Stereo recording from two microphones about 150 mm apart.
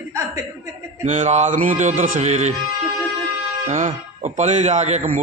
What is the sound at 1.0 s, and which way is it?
A man's voice, 45° right (ahead or behind).